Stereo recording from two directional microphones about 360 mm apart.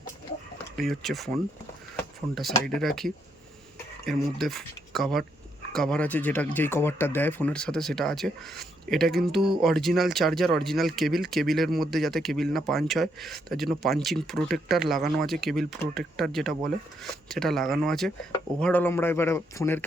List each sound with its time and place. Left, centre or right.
0.8 s speech: centre